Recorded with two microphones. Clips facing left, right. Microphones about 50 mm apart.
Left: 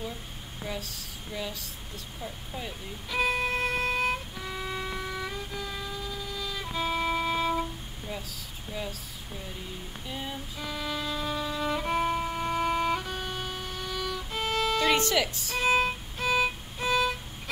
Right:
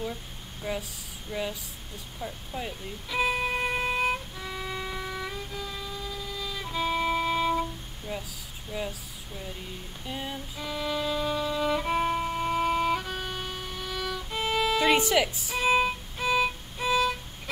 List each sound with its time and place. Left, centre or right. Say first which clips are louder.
0.7 s speech: right 4 dB; centre
3.1 s music: even; centre
8.1 s a sound: right 2 dB; centre
8.7 s speech: right 3 dB; centre
10.0 s music: right 2 dB; centre